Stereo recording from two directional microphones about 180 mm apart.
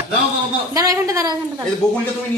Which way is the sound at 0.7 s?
20° right (ahead or behind).